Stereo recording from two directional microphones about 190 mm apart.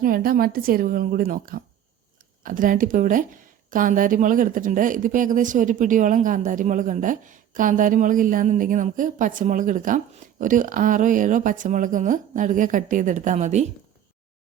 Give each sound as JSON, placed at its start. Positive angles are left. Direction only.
{"t": 0.0, "sound": "speech", "side_deg": -50}